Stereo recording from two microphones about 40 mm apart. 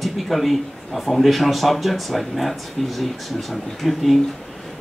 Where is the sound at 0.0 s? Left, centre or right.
Centre.